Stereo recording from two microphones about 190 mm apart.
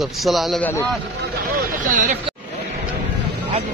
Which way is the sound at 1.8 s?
45° right (ahead or behind).